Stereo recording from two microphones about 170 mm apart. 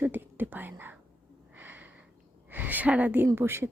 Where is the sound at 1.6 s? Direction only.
10° right (ahead or behind).